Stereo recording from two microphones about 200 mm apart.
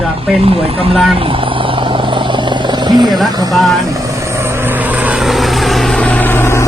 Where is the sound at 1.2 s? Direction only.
25° right (ahead or behind).